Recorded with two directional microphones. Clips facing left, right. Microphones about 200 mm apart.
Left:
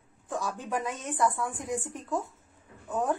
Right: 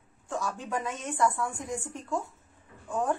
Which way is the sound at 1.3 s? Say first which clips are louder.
Left 1 dB; 20° left (ahead or behind).